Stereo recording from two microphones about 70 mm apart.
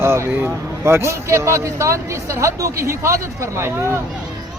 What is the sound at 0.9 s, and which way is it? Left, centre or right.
A man's voice, right.